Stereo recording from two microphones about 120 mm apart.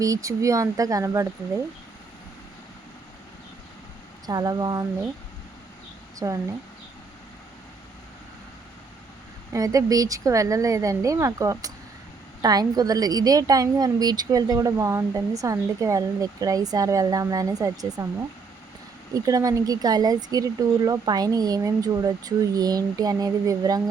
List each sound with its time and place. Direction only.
0.0 s speech: 30° right (ahead or behind)
4.3 s a woman's voice: 35° right (ahead or behind)
6.1 s speech: 30° right (ahead or behind)
9.5 s a woman's voice: 30° right (ahead or behind)
19.1 s a woman's voice: 30° right (ahead or behind)